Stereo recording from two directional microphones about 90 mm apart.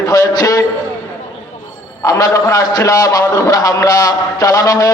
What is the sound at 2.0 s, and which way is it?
A man's voice, 40° left (ahead or behind).